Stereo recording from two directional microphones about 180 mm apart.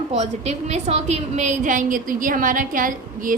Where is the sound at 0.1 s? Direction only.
35° right (ahead or behind).